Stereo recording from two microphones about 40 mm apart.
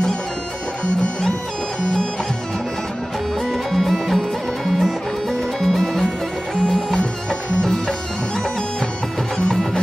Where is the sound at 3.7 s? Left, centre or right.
Centre.